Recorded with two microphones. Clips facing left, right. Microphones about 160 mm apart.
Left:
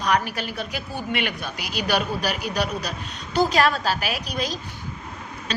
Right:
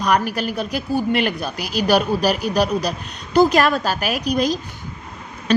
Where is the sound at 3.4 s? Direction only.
50° right (ahead or behind).